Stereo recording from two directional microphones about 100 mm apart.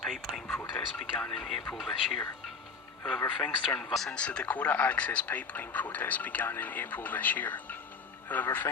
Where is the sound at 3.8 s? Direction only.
Centre (ahead or behind).